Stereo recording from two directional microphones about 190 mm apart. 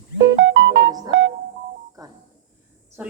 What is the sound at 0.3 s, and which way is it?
Music, 70° right (ahead or behind).